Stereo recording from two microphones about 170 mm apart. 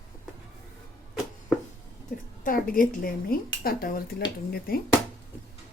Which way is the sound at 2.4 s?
55° left (ahead or behind).